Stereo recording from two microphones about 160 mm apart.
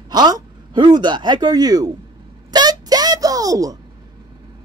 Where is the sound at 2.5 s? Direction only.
25° right (ahead or behind).